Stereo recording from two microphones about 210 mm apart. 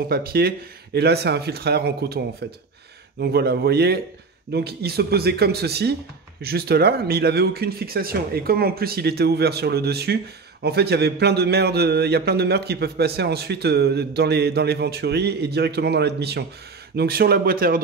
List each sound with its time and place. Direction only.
0.1 s a man's voice: 45° right (ahead or behind)